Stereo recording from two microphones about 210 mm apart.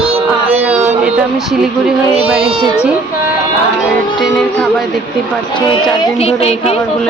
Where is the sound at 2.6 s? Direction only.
5° right (ahead or behind).